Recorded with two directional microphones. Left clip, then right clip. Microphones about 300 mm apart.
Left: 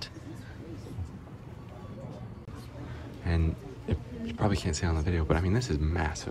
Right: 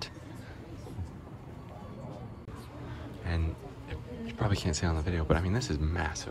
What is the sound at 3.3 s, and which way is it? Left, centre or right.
A man's voice, centre.